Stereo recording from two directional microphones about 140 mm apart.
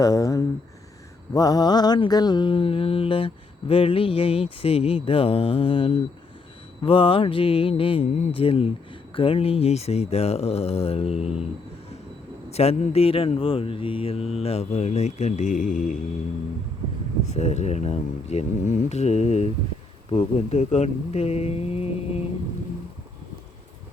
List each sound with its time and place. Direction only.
0.0 s speech: 25° left (ahead or behind)
1.3 s mantra: 25° left (ahead or behind); by 4.4 s 40° left (ahead or behind)
4.6 s speech: 45° left (ahead or behind)
5.0 s mantra: 40° left (ahead or behind)
9.1 s speech: 40° left (ahead or behind)
12.5 s speech: 50° left (ahead or behind); by 16.0 s 65° left (ahead or behind)
17.3 s speech: 55° left (ahead or behind)